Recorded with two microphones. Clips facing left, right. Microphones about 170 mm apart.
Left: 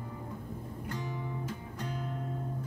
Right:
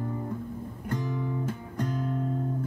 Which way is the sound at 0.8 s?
50° right (ahead or behind).